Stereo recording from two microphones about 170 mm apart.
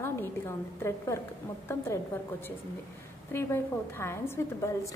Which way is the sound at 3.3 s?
15° left (ahead or behind).